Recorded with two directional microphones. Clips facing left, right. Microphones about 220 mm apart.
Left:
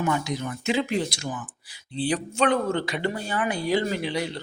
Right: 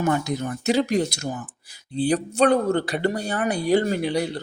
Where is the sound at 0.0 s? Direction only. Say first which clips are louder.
Right 3 dB; 45° right (ahead or behind).